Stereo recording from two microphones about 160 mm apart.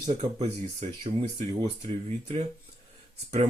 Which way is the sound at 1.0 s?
30° right (ahead or behind).